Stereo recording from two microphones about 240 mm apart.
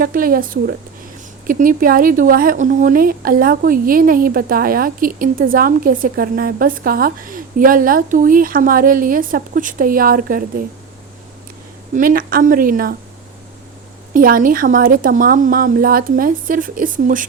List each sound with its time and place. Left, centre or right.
0.0 s speech: right
11.9 s speech: right
14.1 s speech: right